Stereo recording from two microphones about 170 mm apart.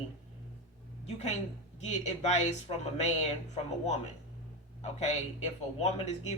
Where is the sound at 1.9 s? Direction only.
40° left (ahead or behind).